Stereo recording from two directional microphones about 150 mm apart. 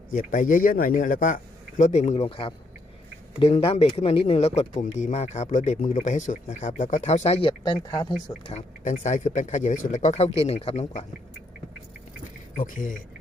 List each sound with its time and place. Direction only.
0.1 s a man's voice: 60° left (ahead or behind); by 7.8 s 35° left (ahead or behind)
7.8 s speech: 25° left (ahead or behind)
8.4 s speech: 50° left (ahead or behind)
12.5 s a man's voice: 65° left (ahead or behind)